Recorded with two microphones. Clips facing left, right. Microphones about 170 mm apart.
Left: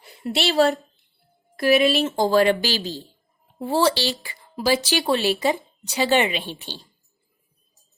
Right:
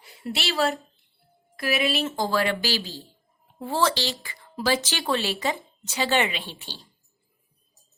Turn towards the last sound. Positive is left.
turn(degrees=20)  # may be behind; listen again after turning